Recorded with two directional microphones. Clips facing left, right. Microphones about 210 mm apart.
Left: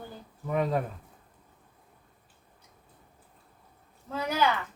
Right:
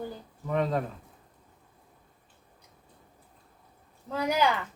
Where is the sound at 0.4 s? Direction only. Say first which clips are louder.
Even; 10° left (ahead or behind).